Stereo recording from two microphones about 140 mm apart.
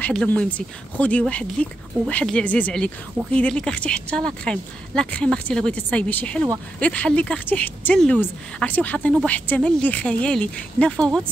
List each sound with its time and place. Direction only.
0.0 s speech: 10° left (ahead or behind)